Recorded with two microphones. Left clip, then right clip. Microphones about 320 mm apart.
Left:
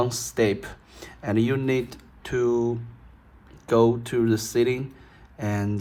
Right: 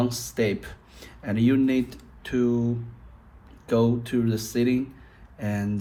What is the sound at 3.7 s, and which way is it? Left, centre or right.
Speech, left.